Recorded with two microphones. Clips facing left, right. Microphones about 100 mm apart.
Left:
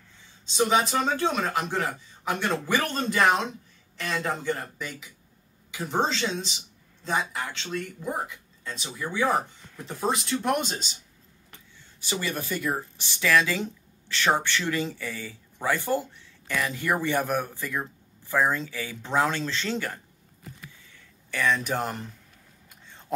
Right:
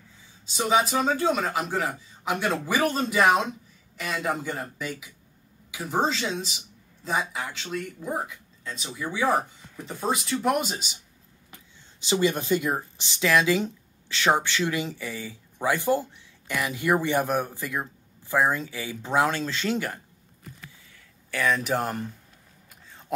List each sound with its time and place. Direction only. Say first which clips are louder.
0.5 s speech: even; 5° right (ahead or behind)
12.0 s speech: right 7 dB; 20° right (ahead or behind)
21.3 s speech: right 1 dB; 10° right (ahead or behind)
22.8 s a sound: right 1 dB; 5° right (ahead or behind)